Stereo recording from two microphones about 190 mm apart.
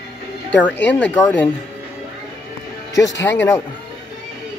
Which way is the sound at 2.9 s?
15° left (ahead or behind).